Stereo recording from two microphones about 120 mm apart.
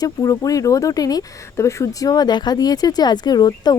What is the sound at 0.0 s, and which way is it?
Speech, 30° left (ahead or behind).